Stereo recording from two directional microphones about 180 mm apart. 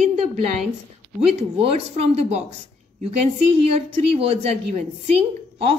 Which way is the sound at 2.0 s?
35° right (ahead or behind).